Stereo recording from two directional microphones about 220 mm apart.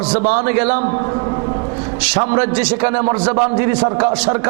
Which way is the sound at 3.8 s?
25° right (ahead or behind).